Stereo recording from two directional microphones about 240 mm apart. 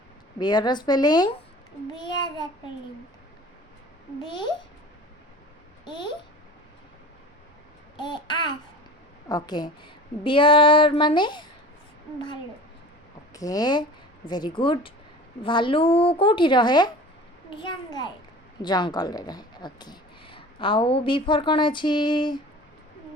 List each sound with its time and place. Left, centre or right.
0.3 s a woman's voice: centre
5.8 s a child's voice: centre
7.9 s a woman's voice: centre
13.3 s a woman's voice: centre